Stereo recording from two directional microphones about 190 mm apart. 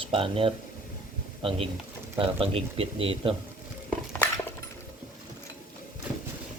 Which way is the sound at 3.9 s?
5° left (ahead or behind).